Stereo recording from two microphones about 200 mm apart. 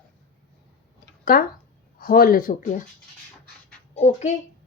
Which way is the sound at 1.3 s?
45° left (ahead or behind).